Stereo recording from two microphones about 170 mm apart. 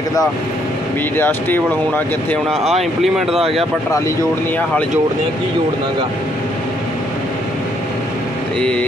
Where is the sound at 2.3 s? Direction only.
Centre (ahead or behind).